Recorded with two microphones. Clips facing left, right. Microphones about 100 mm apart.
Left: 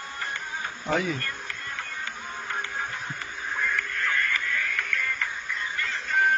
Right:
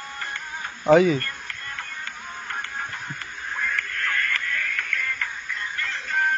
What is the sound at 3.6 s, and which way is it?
Music, 5° left (ahead or behind).